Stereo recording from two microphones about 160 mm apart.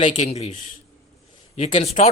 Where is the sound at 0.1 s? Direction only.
45° left (ahead or behind).